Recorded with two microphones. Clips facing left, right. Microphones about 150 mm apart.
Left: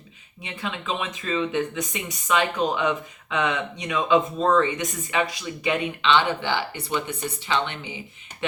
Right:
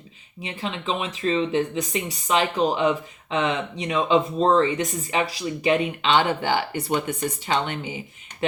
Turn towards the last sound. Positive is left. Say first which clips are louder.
# right 2 dB
turn(degrees=-45)  # may be behind; listen again after turning